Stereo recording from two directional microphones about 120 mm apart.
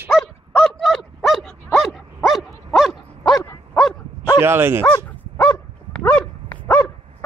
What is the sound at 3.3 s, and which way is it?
Dog, 30° left (ahead or behind).